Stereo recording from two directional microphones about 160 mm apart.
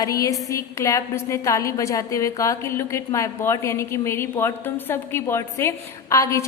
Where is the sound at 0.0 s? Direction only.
20° left (ahead or behind).